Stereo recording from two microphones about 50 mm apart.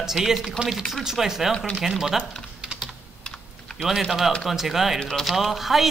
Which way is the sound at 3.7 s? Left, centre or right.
Centre.